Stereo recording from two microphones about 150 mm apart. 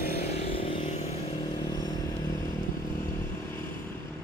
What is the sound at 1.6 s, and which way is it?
Vehicle, 30° left (ahead or behind).